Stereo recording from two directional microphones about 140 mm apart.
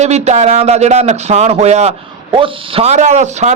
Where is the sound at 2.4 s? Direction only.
40° right (ahead or behind); by 3.5 s 55° right (ahead or behind).